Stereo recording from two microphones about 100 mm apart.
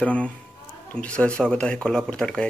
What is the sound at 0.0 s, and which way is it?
Speech, 10° left (ahead or behind).